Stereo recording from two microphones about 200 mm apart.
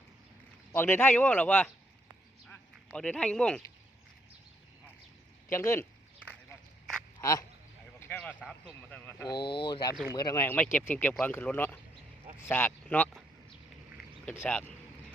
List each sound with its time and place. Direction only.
0.7 s speech: 10° left (ahead or behind)
2.5 s quack: 5° left (ahead or behind)
5.5 s speech: 15° left (ahead or behind)
7.2 s speech: 15° left (ahead or behind)
9.6 s speech: 25° left (ahead or behind)
14.3 s speech: 10° left (ahead or behind)